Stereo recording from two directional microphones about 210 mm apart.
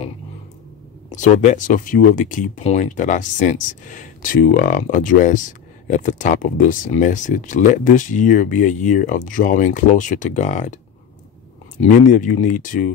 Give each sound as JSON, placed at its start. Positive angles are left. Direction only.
{"t": 1.1, "sound": "speech", "side_deg": 35}
{"t": 11.8, "sound": "speech", "side_deg": 35}